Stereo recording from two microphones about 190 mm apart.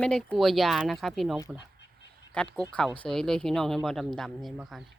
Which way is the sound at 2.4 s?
5° left (ahead or behind).